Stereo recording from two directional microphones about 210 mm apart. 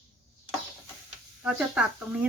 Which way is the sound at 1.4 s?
5° right (ahead or behind).